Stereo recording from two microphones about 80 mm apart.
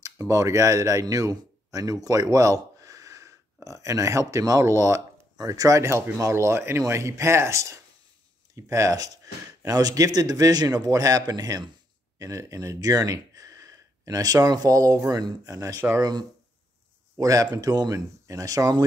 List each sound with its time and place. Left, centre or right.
0.0 s a man's voice: right
16.0 s speech: right
17.2 s a man's voice: right